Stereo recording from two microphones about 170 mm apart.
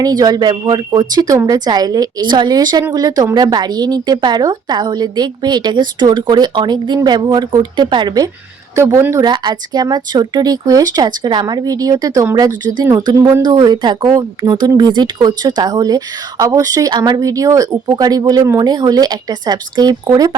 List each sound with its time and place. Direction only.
0.0 s speech: 20° right (ahead or behind)